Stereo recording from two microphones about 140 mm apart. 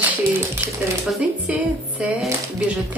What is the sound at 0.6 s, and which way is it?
Speech, 20° right (ahead or behind).